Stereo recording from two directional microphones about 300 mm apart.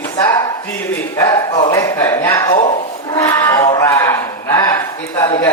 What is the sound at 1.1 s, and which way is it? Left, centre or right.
A man's voice, centre.